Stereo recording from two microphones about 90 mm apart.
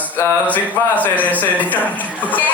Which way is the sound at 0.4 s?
20° left (ahead or behind).